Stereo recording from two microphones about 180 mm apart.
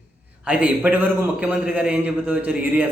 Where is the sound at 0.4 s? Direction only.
10° right (ahead or behind).